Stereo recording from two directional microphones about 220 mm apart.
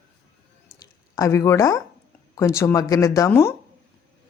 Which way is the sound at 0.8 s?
15° left (ahead or behind).